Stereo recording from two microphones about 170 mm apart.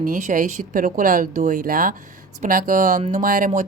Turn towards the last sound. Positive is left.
turn(degrees=-50)  # may be behind; listen again after turning